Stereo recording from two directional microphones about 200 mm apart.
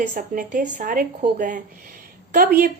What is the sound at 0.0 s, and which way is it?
A woman's voice, 40° right (ahead or behind).